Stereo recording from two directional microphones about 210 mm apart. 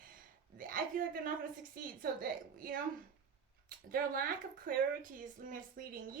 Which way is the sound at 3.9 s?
40° right (ahead or behind).